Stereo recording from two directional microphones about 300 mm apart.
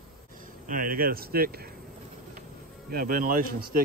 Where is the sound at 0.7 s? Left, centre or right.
Right.